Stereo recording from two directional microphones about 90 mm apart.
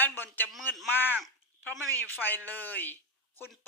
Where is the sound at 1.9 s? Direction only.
20° left (ahead or behind).